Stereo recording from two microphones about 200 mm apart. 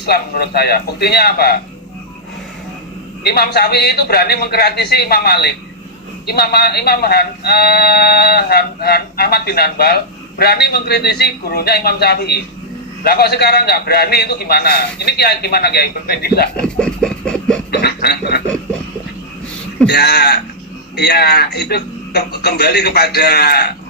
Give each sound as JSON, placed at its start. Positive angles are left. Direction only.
{"t": 0.0, "sound": "speech", "side_deg": 50}
{"t": 3.2, "sound": "speech", "side_deg": 50}
{"t": 16.6, "sound": "a sound", "side_deg": 5}
{"t": 17.7, "sound": "speech", "side_deg": 55}
{"t": 19.9, "sound": "speech", "side_deg": 55}